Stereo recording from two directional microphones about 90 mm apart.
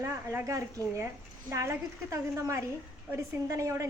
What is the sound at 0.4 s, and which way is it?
A woman's voice, 35° right (ahead or behind).